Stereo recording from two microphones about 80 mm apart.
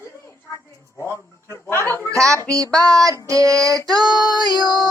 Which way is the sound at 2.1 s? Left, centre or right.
Right.